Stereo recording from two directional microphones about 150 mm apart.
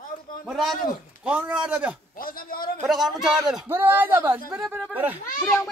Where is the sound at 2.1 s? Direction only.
70° left (ahead or behind).